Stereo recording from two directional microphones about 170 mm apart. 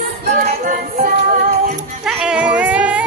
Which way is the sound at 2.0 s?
5° right (ahead or behind).